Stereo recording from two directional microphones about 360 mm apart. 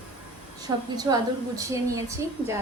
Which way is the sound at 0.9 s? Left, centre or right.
Centre.